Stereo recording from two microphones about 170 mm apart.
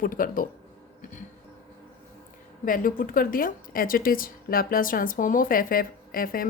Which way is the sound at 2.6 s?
55° left (ahead or behind).